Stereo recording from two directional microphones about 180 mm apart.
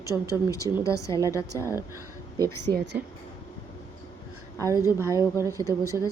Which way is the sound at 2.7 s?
25° right (ahead or behind).